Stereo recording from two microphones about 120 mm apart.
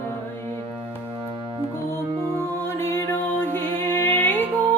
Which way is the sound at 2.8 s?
20° left (ahead or behind).